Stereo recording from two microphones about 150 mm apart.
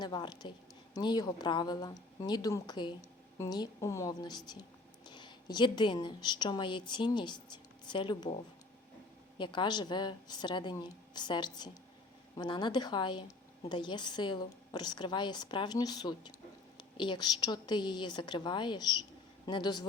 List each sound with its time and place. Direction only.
0.0 s a woman's voice: 30° left (ahead or behind)
9.4 s a woman's voice: 30° left (ahead or behind)